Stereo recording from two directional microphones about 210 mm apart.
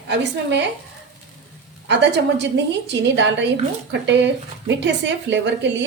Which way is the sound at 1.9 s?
55° right (ahead or behind).